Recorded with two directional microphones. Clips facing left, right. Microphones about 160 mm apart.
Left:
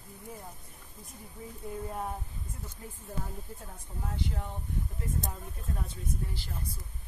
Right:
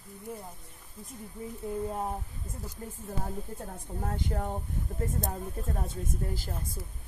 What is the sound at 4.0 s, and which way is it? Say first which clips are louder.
Speech: right 4 dB; 50° right (ahead or behind).